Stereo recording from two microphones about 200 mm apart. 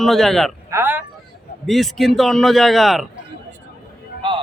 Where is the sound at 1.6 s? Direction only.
Centre (ahead or behind).